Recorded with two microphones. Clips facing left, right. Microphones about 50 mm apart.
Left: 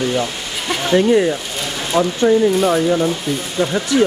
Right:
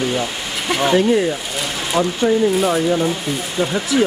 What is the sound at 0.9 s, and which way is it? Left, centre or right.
Speech, centre.